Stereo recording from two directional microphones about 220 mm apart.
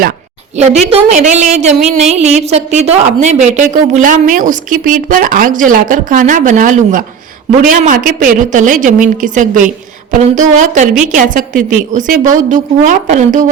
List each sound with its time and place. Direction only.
0.9 s a woman's voice: 30° right (ahead or behind)